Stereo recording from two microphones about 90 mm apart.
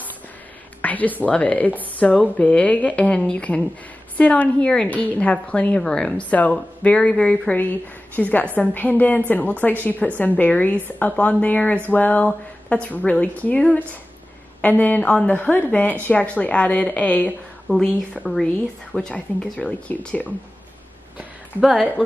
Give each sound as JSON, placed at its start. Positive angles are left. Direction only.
{"t": 0.8, "sound": "a woman's voice", "side_deg": 20}
{"t": 18.1, "sound": "a woman's voice", "side_deg": 5}
{"t": 21.5, "sound": "speech", "side_deg": -5}